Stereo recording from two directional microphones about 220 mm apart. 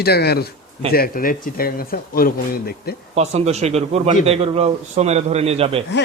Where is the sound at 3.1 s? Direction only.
30° right (ahead or behind).